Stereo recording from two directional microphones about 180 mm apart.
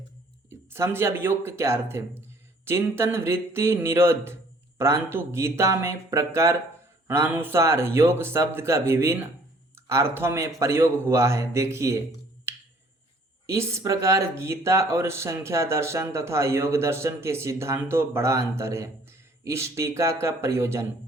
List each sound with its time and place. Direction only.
0.7 s speech: 15° right (ahead or behind)
13.5 s speech: 15° right (ahead or behind)